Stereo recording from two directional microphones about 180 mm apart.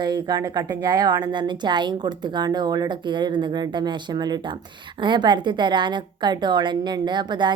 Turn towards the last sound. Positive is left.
turn(degrees=-25)  # may be behind; listen again after turning